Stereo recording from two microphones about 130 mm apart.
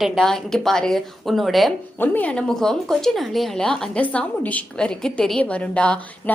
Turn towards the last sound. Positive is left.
turn(degrees=10)  # may be behind; listen again after turning